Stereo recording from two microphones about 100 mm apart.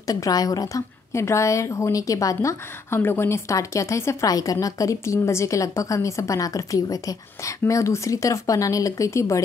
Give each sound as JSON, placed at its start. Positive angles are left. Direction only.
{"t": 0.0, "sound": "speech", "side_deg": 35}